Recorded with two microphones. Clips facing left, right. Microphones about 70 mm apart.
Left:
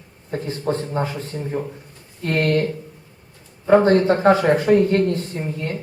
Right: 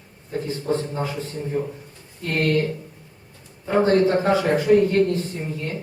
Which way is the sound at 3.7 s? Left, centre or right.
Left.